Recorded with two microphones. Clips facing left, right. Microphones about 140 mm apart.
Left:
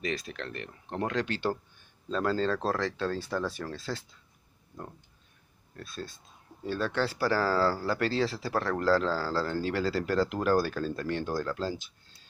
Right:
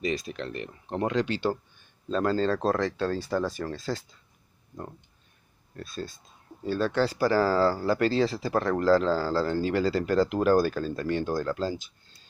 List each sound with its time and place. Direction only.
0.0 s speech: 5° right (ahead or behind)
6.6 s speech: centre (ahead or behind)
7.9 s speech: centre (ahead or behind)